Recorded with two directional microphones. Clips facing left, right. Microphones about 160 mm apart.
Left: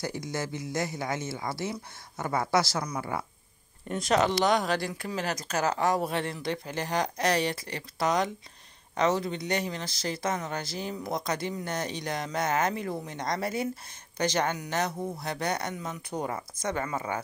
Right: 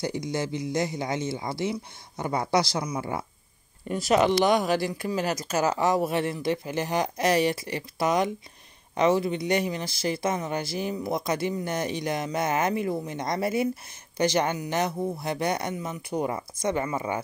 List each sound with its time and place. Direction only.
0.0 s speech: 20° right (ahead or behind)
3.9 s speech: 5° right (ahead or behind)